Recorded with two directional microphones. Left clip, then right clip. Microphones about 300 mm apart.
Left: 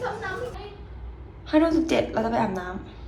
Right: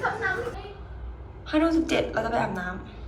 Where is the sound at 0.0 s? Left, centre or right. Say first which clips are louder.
Right 3 dB; centre.